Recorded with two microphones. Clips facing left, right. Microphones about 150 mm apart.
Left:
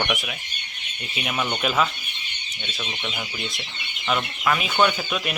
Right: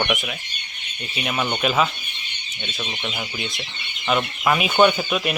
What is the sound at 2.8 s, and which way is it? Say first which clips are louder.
Speech: right 2 dB; 15° right (ahead or behind).